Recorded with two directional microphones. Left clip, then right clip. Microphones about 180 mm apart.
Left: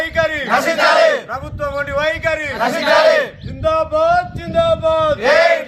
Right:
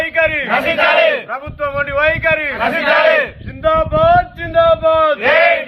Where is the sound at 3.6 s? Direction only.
55° left (ahead or behind).